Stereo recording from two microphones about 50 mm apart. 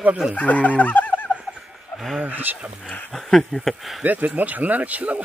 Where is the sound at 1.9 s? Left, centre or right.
Centre.